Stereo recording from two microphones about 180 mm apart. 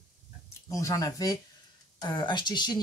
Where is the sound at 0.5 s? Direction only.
15° left (ahead or behind).